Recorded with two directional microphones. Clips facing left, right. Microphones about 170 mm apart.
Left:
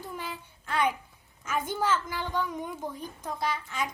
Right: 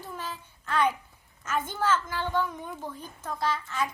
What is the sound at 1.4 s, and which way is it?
A woman's voice, 10° left (ahead or behind).